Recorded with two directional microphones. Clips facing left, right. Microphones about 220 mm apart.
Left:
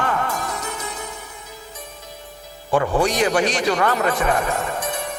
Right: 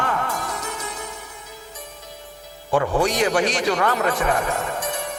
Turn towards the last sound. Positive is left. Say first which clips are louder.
# left 1 dB
turn(degrees=20)  # may be behind; listen again after turning